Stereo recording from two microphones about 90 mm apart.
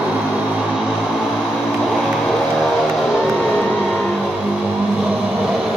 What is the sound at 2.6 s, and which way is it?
Vehicle, 5° left (ahead or behind).